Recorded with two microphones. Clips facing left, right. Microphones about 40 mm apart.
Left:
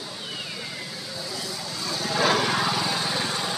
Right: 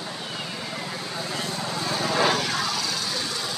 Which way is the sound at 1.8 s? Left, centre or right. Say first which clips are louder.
Right 3 dB; right.